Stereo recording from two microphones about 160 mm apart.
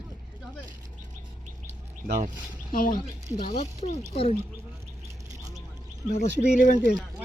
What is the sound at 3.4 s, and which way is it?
Speech, 45° left (ahead or behind).